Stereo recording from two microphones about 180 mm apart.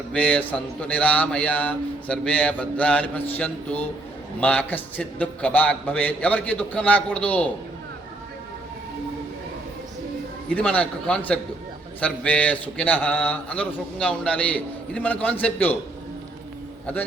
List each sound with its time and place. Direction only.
0.1 s speech: 10° left (ahead or behind)
10.5 s speech: 10° left (ahead or behind)
16.8 s a man's voice: 10° left (ahead or behind)